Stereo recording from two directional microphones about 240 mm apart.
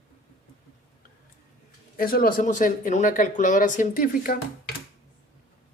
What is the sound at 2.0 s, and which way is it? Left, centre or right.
Speech, left.